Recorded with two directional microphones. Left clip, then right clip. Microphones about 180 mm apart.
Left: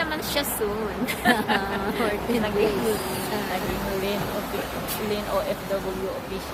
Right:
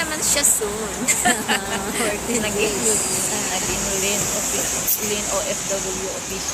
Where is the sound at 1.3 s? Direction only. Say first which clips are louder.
Even; 25° right (ahead or behind).